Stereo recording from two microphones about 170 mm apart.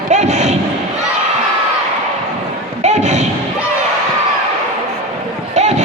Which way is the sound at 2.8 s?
45° right (ahead or behind).